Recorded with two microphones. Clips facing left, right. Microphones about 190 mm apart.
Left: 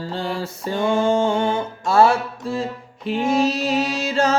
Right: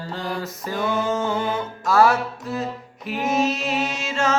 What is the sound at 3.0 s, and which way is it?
Mantra, 30° left (ahead or behind).